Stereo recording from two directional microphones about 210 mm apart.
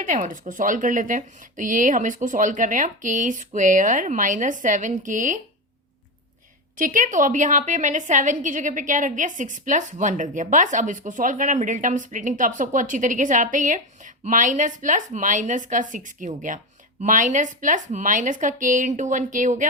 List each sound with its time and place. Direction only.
0.0 s a woman's voice: 40° right (ahead or behind)
6.7 s a woman's voice: 40° right (ahead or behind)